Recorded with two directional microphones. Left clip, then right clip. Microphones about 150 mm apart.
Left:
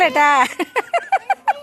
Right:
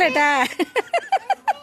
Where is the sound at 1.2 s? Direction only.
40° right (ahead or behind).